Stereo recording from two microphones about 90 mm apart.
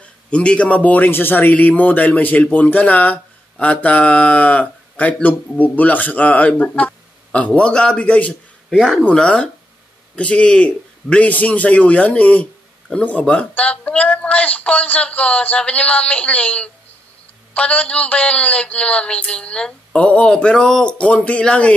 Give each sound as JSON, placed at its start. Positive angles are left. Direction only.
{"t": 0.3, "sound": "a man's voice", "side_deg": 15}
{"t": 8.3, "sound": "speech", "side_deg": 0}
{"t": 9.0, "sound": "a man's voice", "side_deg": 10}